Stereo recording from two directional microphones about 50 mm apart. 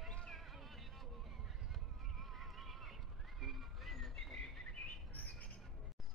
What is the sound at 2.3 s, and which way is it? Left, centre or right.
Neigh, centre.